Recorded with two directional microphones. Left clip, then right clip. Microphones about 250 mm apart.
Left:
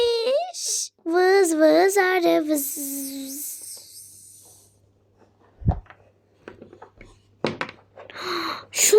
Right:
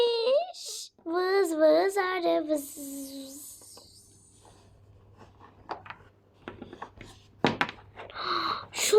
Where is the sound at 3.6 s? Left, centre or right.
Left.